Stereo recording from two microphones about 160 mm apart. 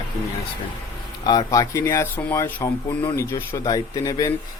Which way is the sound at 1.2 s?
25° left (ahead or behind).